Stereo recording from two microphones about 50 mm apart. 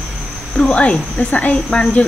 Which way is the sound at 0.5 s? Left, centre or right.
Centre.